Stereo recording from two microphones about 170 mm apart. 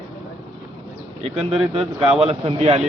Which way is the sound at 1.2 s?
35° right (ahead or behind).